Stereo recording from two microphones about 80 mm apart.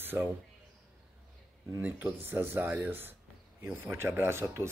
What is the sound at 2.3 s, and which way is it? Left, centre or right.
Speech, right.